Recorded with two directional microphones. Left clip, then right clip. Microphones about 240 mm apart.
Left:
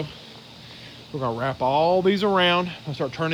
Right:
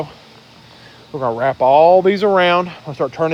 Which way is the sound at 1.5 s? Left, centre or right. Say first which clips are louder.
Right 11 dB; right.